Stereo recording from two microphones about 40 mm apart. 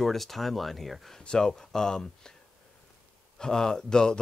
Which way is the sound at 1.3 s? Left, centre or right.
Centre.